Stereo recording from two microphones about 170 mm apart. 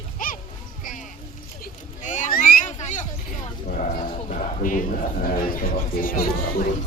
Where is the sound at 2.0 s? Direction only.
45° left (ahead or behind).